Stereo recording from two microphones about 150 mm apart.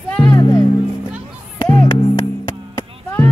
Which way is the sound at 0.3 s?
25° left (ahead or behind).